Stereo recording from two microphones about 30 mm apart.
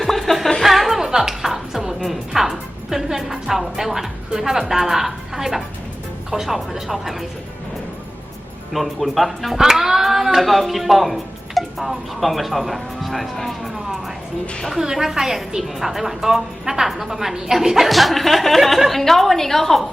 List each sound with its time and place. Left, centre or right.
0.0 s music: centre
0.9 s music: centre
2.0 s a woman's voice: centre
8.7 s speech: centre
9.6 s speech: centre
13.3 s music: centre
14.8 s a woman's voice: centre
17.8 s a woman's voice: centre